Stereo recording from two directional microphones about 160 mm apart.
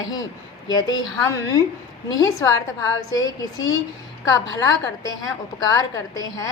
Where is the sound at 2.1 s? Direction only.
20° left (ahead or behind).